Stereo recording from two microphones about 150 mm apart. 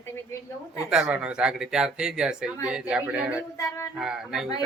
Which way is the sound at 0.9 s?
5° right (ahead or behind).